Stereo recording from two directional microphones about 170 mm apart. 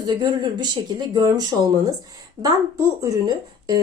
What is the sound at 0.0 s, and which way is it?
Speech, 25° right (ahead or behind).